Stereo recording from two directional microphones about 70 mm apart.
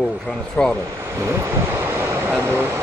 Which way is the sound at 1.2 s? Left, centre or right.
Right.